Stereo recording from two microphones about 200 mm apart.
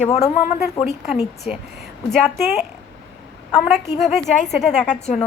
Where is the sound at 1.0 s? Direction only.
5° right (ahead or behind).